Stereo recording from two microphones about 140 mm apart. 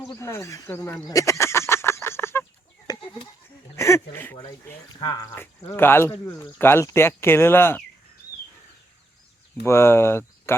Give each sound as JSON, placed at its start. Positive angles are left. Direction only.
{"t": 0.2, "sound": "speech", "side_deg": 20}
{"t": 1.0, "sound": "fowl", "side_deg": 25}
{"t": 2.8, "sound": "goat", "side_deg": 30}
{"t": 3.8, "sound": "a sound", "side_deg": 20}
{"t": 4.1, "sound": "speech", "side_deg": 15}
{"t": 4.9, "sound": "speech", "side_deg": 35}
{"t": 5.2, "sound": "speech", "side_deg": 15}
{"t": 9.6, "sound": "speech", "side_deg": 20}